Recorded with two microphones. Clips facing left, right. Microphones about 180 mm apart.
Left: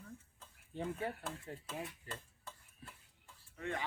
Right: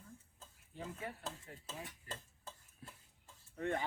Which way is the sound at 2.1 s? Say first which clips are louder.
Left 1 dB; 30° right (ahead or behind).